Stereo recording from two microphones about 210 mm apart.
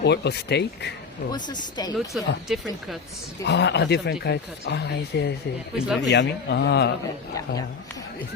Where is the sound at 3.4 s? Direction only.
55° left (ahead or behind).